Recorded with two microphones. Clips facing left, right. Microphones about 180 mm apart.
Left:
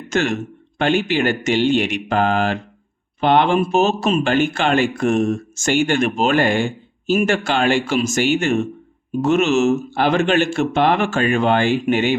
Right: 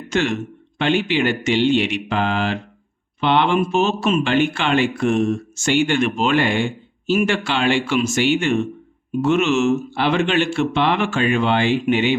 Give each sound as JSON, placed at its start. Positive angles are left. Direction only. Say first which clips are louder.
{"t": 0.1, "sound": "speech", "louder": "left 1 dB", "side_deg": 45}